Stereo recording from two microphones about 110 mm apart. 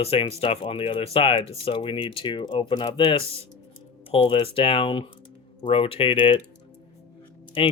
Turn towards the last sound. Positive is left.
turn(degrees=55)  # may be behind; listen again after turning